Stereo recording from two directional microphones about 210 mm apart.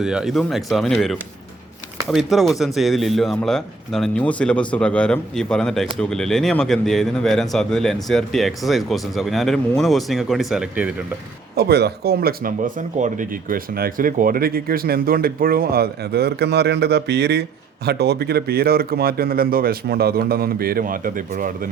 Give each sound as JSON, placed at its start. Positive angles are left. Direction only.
{"t": 0.0, "sound": "speech", "side_deg": -5}
{"t": 11.5, "sound": "speech", "side_deg": -50}